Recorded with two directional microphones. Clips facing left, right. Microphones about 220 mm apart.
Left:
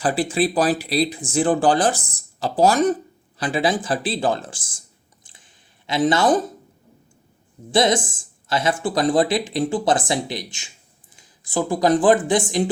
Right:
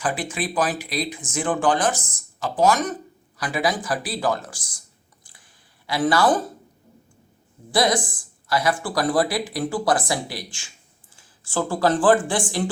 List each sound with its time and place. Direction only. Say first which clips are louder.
0.0 s speech: left 6 dB; 35° left (ahead or behind)
5.2 s a sound: left 1 dB; 20° left (ahead or behind)
7.7 s speech: left 3 dB; 25° left (ahead or behind)